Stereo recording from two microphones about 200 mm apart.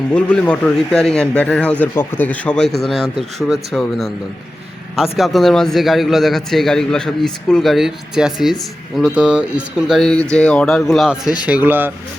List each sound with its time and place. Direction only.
0.1 s a man's voice: 5° left (ahead or behind)